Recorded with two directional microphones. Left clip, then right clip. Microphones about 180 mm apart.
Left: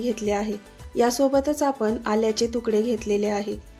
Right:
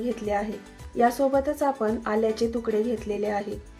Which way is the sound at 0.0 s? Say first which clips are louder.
Left 2 dB; 45° left (ahead or behind).